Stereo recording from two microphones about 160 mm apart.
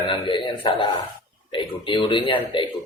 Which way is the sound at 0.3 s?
30° left (ahead or behind).